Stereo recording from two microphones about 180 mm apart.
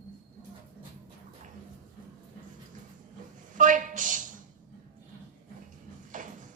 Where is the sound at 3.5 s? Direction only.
45° right (ahead or behind).